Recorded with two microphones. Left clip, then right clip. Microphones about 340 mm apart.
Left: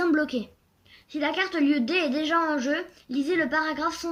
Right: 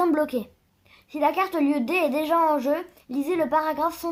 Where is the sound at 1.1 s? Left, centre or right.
Right.